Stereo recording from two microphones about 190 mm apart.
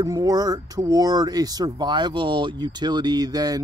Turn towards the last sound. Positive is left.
turn(degrees=-20)  # may be behind; listen again after turning